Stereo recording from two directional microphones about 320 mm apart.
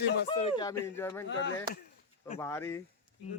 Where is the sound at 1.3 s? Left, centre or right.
Left.